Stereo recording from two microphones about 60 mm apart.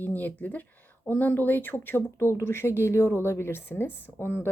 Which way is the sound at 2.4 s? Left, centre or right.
Left.